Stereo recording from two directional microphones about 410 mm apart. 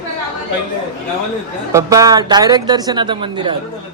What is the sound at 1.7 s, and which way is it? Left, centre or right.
A man's voice, centre.